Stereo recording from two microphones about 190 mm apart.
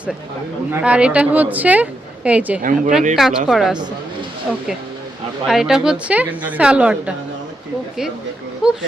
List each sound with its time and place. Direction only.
0.7 s a woman's voice: 5° right (ahead or behind)
2.6 s speech: 45° right (ahead or behind)
3.2 s a woman's voice: centre (ahead or behind)
5.5 s a woman's voice: centre (ahead or behind)
8.6 s a woman's voice: 5° right (ahead or behind)